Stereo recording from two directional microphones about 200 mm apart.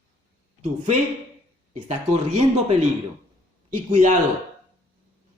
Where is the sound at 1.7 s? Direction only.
35° right (ahead or behind).